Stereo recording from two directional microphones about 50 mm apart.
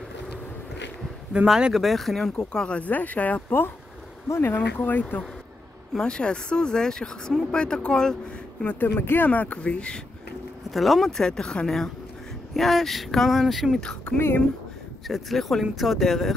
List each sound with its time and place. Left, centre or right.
1.3 s speech: centre
1.7 s speech: centre
2.5 s speech: centre
2.8 s speech: left
4.3 s speech: left
4.6 s speech: left
5.9 s speech: centre
8.6 s speech: left
9.3 s speech: left
10.7 s speech: centre
14.1 s speech: left
15.0 s speech: centre